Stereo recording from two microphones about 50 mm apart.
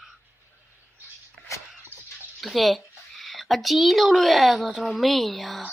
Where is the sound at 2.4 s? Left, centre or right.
Centre.